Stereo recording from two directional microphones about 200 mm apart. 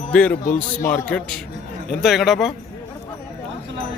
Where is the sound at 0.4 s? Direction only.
40° left (ahead or behind).